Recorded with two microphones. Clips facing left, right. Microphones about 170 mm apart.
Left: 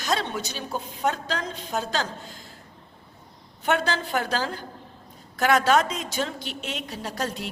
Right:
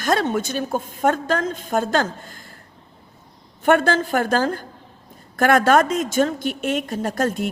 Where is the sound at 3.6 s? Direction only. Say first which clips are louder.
Right 8 dB; 50° right (ahead or behind).